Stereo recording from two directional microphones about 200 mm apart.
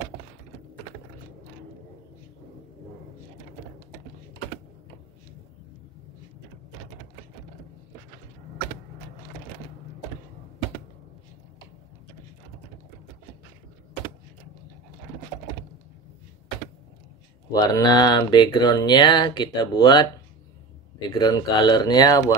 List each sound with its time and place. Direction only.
17.5 s speech: 20° left (ahead or behind)
21.1 s speech: 20° left (ahead or behind)